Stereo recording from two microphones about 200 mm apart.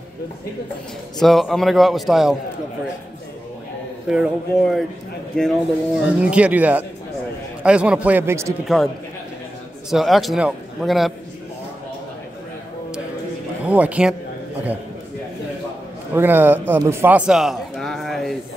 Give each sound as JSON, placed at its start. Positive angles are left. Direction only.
{"t": 1.2, "sound": "a man's voice", "side_deg": 0}
{"t": 4.1, "sound": "a man's voice", "side_deg": 0}
{"t": 8.6, "sound": "a man's voice", "side_deg": 0}
{"t": 13.7, "sound": "a man's voice", "side_deg": -5}
{"t": 16.2, "sound": "speech", "side_deg": -10}